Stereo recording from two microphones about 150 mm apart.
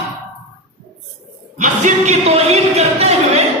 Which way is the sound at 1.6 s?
55° right (ahead or behind).